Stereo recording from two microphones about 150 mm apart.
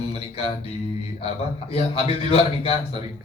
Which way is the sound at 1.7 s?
40° left (ahead or behind).